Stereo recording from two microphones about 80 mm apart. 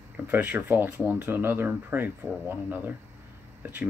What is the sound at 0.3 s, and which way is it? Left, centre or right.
Speech, right.